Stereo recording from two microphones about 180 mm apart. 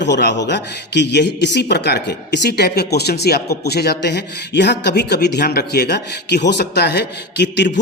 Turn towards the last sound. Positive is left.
turn(degrees=70)  # may be behind; listen again after turning